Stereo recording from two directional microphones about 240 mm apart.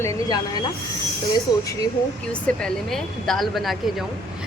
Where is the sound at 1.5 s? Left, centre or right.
Centre.